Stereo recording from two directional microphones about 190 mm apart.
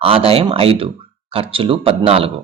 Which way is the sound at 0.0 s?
30° right (ahead or behind).